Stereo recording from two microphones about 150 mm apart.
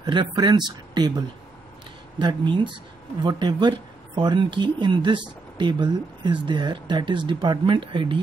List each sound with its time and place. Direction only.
0.0 s speech: 30° right (ahead or behind)
2.1 s speech: 30° right (ahead or behind)